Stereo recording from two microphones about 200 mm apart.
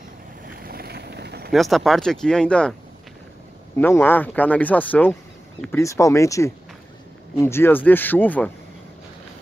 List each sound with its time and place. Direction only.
0.7 s vehicle: 50° right (ahead or behind)
1.5 s speech: centre (ahead or behind)
3.7 s speech: 10° left (ahead or behind)